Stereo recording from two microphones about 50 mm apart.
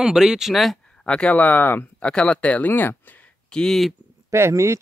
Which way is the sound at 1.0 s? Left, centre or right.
Centre.